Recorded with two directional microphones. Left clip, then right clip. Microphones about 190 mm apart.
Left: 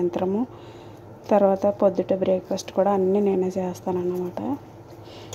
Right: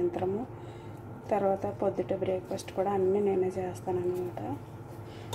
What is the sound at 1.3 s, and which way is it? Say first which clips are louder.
Speech: left 10 dB; 40° left (ahead or behind).